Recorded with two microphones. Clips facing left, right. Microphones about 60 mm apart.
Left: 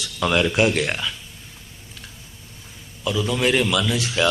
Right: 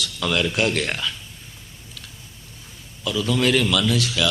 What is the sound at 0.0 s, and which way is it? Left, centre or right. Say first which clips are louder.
Speech: left 3 dB; left.